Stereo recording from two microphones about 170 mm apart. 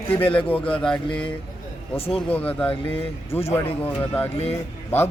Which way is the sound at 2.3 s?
10° left (ahead or behind).